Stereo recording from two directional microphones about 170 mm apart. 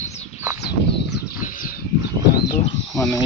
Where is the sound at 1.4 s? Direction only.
55° left (ahead or behind).